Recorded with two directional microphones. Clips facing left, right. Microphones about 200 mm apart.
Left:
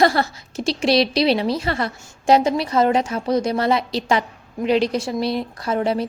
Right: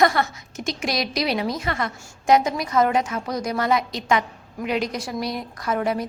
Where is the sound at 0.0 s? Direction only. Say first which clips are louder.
Left 2 dB; 30° left (ahead or behind).